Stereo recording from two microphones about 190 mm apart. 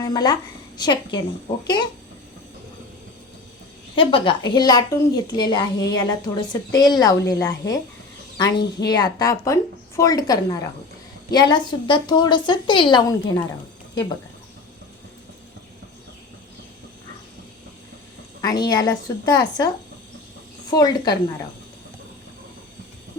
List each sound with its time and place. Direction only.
0.0 s a woman's voice: 20° left (ahead or behind)
3.9 s a woman's voice: 25° left (ahead or behind)
18.4 s a woman's voice: 20° left (ahead or behind)